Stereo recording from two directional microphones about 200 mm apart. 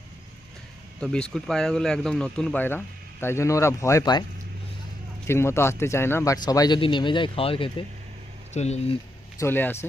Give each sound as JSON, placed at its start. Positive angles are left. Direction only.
{"t": 0.9, "sound": "speech", "side_deg": 5}
{"t": 5.3, "sound": "speech", "side_deg": 10}
{"t": 9.4, "sound": "speech", "side_deg": 10}